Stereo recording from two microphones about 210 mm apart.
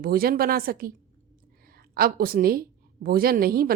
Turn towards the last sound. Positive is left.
turn(degrees=-45)  # may be behind; listen again after turning